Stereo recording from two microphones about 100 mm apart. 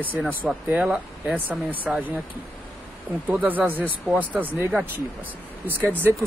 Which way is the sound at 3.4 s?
15° right (ahead or behind).